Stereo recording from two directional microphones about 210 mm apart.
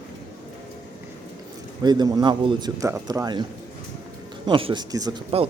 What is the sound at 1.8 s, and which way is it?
A man's voice, 20° right (ahead or behind).